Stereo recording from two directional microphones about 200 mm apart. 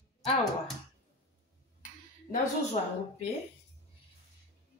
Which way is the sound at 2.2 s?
35° left (ahead or behind).